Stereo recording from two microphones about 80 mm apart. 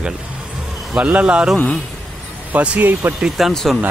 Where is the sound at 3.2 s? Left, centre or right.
Centre.